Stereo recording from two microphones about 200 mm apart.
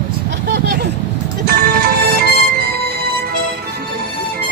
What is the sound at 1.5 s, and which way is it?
Music, 50° right (ahead or behind).